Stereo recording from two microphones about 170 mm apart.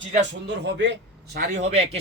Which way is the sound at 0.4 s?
90° right.